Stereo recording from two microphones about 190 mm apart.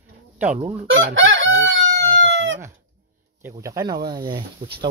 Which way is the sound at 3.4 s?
15° right (ahead or behind).